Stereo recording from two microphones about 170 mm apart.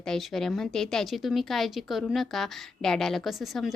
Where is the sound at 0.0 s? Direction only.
Centre (ahead or behind).